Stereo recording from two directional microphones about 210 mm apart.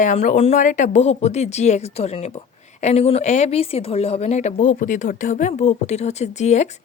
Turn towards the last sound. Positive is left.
turn(degrees=35)  # may be behind; listen again after turning